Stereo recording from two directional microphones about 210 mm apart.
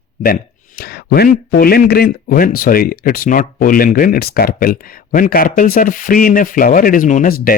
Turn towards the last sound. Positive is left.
turn(degrees=45)  # may be behind; listen again after turning